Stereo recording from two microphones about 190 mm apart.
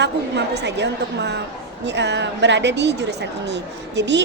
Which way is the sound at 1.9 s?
65° right (ahead or behind).